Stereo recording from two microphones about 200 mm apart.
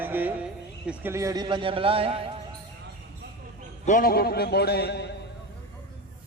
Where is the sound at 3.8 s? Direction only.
45° left (ahead or behind).